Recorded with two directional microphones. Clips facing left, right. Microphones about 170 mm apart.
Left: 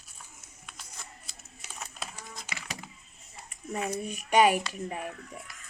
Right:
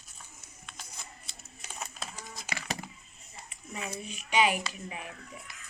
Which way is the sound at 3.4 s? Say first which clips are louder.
Left 7 dB; 45° left (ahead or behind).